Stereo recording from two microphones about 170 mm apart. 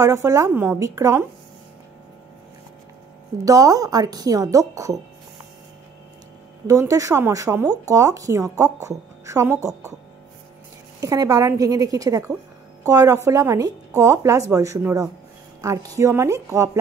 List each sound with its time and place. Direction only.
0.0 s speech: 20° right (ahead or behind)
3.4 s speech: 20° right (ahead or behind)
6.7 s a woman's voice: 20° right (ahead or behind)
11.0 s a woman's voice: 20° right (ahead or behind)